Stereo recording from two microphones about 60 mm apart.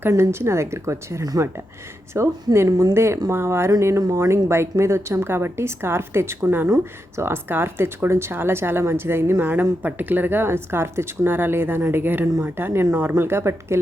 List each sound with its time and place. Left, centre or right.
0.1 s speech: right
1.2 s speech: right
2.1 s speech: right